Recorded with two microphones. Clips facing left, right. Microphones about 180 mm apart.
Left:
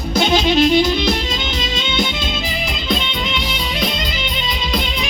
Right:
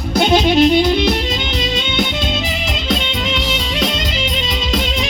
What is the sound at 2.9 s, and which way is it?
Music, 90° right.